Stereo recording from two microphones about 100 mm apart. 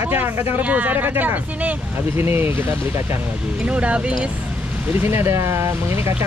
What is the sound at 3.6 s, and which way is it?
Speech, 10° right (ahead or behind).